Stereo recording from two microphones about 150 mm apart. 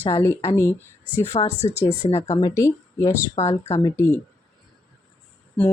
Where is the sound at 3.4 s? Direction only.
45° left (ahead or behind).